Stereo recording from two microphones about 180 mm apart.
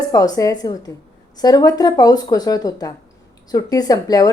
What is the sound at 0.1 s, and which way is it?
Speech, 20° left (ahead or behind).